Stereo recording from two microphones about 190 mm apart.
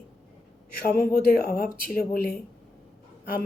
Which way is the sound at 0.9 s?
50° left (ahead or behind).